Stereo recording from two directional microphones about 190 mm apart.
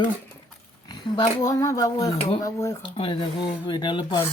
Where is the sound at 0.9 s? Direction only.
25° left (ahead or behind).